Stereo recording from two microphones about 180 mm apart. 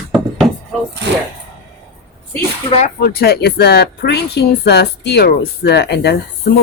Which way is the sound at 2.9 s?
60° left (ahead or behind).